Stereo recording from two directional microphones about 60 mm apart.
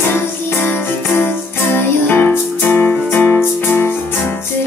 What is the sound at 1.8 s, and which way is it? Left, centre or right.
Music, left.